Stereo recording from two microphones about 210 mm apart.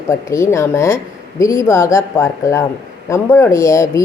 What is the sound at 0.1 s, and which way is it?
Speech, 15° left (ahead or behind).